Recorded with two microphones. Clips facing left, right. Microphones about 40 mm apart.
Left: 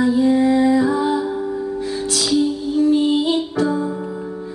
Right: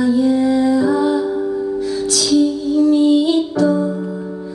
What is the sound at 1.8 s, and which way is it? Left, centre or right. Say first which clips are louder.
Music: right 3 dB; left.